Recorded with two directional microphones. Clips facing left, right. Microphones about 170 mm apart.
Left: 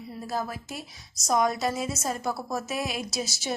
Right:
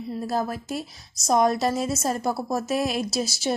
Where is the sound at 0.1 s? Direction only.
30° right (ahead or behind).